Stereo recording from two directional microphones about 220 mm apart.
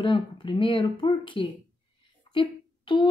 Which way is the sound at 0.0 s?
20° left (ahead or behind).